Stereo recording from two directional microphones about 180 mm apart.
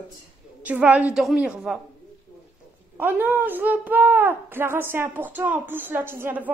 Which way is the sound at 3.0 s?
10° right (ahead or behind).